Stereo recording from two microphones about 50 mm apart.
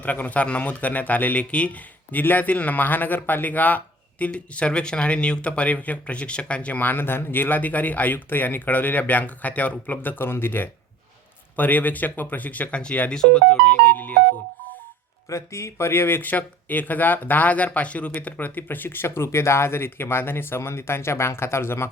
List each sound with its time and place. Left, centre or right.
0.0 s speech: left
6.7 s speech: left
11.5 s speech: left
15.3 s speech: left
16.3 s speech: left